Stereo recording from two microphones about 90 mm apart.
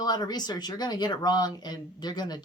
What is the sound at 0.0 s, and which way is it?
Speech, 50° left (ahead or behind).